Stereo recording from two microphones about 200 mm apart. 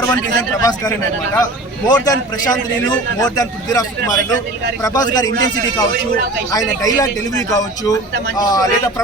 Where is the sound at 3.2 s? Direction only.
20° left (ahead or behind).